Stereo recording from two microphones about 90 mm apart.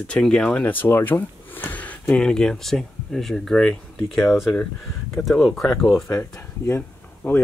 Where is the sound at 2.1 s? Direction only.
5° left (ahead or behind).